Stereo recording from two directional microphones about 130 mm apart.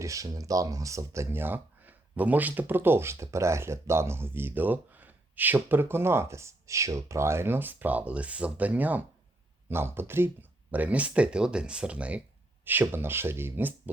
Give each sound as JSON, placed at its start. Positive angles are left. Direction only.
{"t": 0.0, "sound": "speech", "side_deg": -25}